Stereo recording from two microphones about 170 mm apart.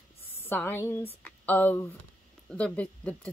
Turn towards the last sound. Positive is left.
turn(degrees=5)  # may be behind; listen again after turning